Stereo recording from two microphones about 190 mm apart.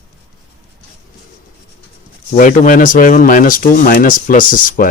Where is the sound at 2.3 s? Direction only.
45° left (ahead or behind).